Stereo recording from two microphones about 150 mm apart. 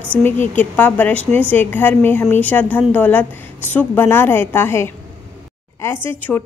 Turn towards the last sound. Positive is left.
turn(degrees=10)  # may be behind; listen again after turning